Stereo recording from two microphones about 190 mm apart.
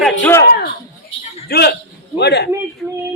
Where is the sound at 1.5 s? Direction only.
60° left (ahead or behind).